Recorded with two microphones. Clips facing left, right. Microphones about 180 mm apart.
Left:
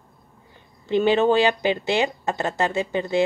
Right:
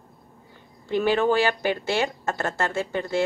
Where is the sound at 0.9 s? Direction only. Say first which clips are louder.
Left 3 dB; 20° left (ahead or behind).